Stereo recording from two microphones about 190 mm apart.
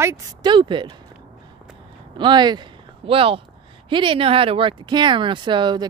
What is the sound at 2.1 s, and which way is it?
Speech, 25° right (ahead or behind).